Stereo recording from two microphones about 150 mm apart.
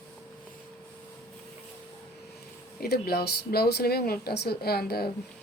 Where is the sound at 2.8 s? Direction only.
90° left.